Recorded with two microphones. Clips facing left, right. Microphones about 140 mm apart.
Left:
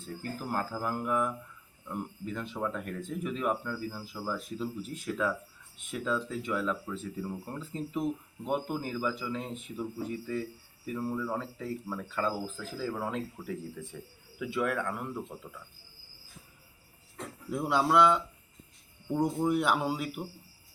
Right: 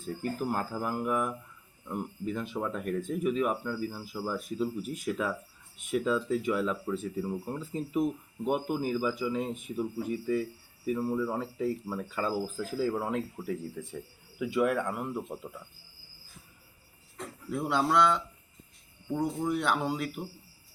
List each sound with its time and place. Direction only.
0.0 s speech: 10° right (ahead or behind)
17.5 s speech: 10° left (ahead or behind)